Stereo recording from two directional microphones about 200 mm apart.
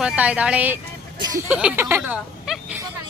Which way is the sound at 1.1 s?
20° right (ahead or behind).